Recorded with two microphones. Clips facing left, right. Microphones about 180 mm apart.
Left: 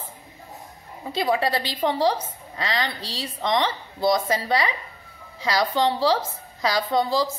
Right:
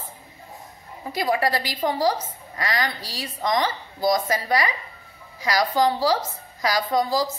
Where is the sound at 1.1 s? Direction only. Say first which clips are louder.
Even; 25° left (ahead or behind).